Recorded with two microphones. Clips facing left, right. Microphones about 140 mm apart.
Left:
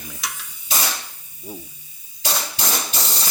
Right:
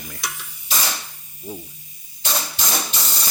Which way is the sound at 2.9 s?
35° left (ahead or behind).